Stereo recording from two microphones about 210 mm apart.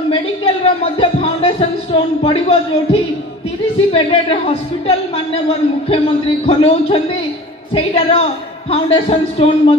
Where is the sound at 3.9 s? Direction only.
25° left (ahead or behind).